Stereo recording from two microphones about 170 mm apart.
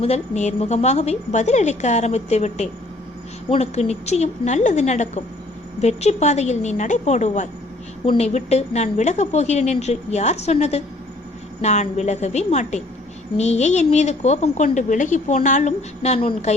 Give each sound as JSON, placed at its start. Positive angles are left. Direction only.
{"t": 0.0, "sound": "a woman's voice", "side_deg": 40}